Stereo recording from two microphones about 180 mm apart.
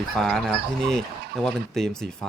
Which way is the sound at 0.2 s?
Centre (ahead or behind).